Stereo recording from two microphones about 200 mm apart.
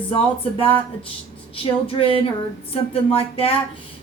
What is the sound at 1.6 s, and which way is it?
A woman's voice, 25° left (ahead or behind).